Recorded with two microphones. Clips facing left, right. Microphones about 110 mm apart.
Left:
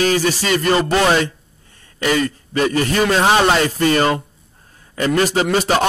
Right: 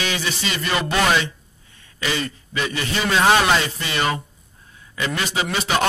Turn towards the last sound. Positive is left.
turn(degrees=40)  # may be behind; listen again after turning